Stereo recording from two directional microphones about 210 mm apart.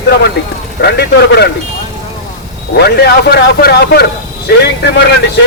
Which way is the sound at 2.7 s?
50° left (ahead or behind).